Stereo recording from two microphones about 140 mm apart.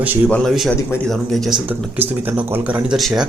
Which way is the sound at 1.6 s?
15° right (ahead or behind).